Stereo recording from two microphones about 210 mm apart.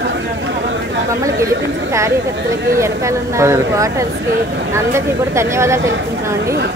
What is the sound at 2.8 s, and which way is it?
A woman's voice, 15° right (ahead or behind).